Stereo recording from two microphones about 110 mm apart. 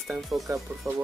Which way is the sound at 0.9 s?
Centre (ahead or behind).